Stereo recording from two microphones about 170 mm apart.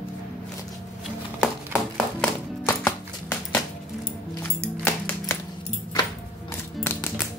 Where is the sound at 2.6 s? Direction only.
15° left (ahead or behind).